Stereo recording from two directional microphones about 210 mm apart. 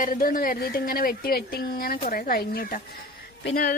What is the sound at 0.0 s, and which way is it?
A woman's voice, 40° left (ahead or behind).